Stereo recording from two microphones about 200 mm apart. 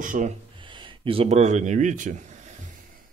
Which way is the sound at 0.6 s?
25° right (ahead or behind).